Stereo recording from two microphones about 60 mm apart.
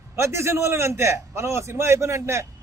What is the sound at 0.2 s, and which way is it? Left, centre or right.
A man's voice, right.